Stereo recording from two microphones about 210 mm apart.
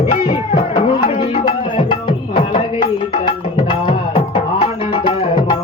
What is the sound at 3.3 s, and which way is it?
Music, 25° left (ahead or behind).